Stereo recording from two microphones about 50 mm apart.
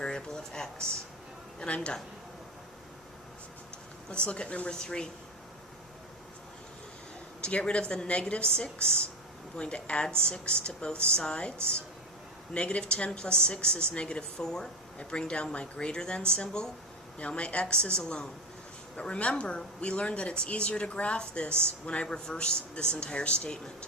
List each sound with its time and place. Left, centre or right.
0.0 s a sound: centre
1.5 s speech: left
4.1 s speech: left
7.4 s speech: left
12.5 s speech: left